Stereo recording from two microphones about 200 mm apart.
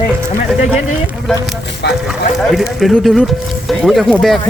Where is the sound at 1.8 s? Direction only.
55° left (ahead or behind).